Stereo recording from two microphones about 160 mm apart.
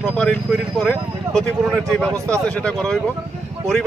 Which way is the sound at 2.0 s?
20° right (ahead or behind).